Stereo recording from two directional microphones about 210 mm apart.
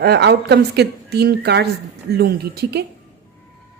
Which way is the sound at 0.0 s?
55° right (ahead or behind).